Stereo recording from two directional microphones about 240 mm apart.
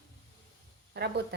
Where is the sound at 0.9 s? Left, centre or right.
Right.